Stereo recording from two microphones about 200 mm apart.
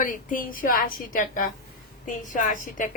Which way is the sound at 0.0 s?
40° left (ahead or behind).